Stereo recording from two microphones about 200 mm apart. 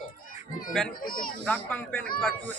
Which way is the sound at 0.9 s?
45° left (ahead or behind).